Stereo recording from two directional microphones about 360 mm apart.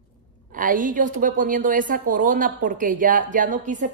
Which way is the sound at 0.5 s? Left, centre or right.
Right.